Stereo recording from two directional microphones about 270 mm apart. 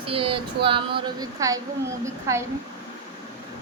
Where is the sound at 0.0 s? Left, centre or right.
Centre.